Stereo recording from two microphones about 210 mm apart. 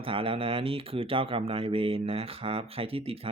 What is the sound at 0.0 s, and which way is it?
Speech, 25° right (ahead or behind).